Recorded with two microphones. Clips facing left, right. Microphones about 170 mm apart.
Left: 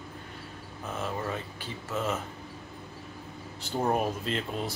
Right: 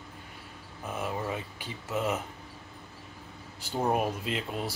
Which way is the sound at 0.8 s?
10° right (ahead or behind).